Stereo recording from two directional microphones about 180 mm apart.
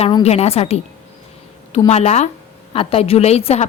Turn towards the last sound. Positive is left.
turn(degrees=35)  # may be behind; listen again after turning